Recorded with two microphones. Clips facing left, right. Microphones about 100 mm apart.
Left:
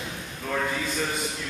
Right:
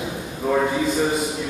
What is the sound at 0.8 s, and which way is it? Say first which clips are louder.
Speech: right 9 dB; 10° right (ahead or behind).